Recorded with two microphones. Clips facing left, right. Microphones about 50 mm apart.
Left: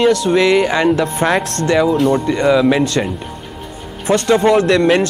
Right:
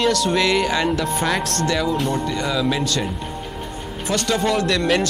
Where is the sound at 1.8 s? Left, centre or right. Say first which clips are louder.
Left 8 dB; centre.